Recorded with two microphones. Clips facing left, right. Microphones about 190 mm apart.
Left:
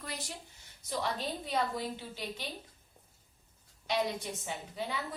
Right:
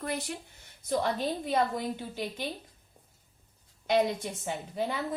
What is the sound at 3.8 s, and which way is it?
A woman's voice, 50° right (ahead or behind).